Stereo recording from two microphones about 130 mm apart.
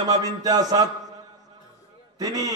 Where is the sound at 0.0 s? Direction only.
30° right (ahead or behind).